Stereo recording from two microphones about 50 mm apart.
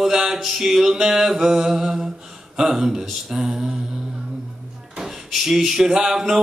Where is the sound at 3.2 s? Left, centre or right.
Centre.